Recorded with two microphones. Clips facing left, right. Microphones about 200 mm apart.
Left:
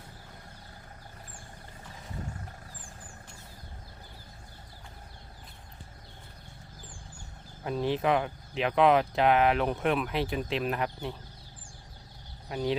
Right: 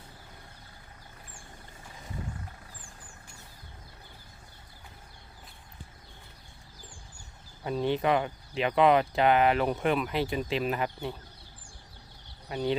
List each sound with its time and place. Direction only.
7.6 s speech: centre (ahead or behind)
12.5 s speech: centre (ahead or behind)